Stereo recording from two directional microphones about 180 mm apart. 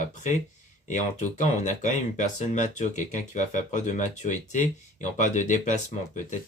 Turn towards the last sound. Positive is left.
turn(degrees=45)  # may be behind; listen again after turning